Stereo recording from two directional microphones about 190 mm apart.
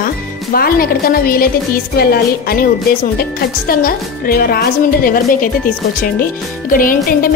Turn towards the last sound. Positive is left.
turn(degrees=45)  # may be behind; listen again after turning